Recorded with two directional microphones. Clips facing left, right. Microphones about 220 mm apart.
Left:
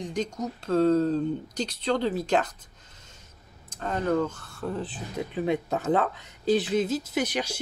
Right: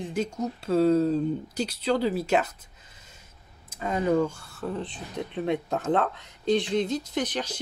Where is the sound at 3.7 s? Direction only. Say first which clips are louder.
Right 2 dB; 10° right (ahead or behind).